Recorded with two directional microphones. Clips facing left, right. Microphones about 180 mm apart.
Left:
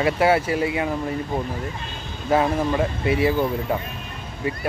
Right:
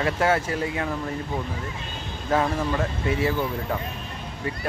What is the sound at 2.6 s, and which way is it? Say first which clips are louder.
Speech: left 4 dB; 15° left (ahead or behind).